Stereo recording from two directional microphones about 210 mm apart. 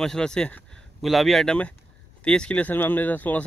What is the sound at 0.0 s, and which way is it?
Speech, 5° left (ahead or behind).